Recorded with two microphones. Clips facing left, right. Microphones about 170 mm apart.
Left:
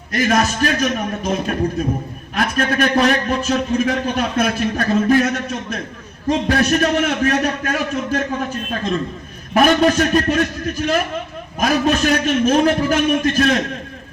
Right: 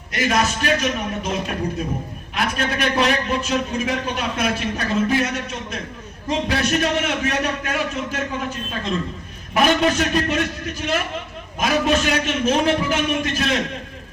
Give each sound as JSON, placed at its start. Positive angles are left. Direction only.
{"t": 0.1, "sound": "a man's voice", "side_deg": 45}
{"t": 11.6, "sound": "a man's voice", "side_deg": 45}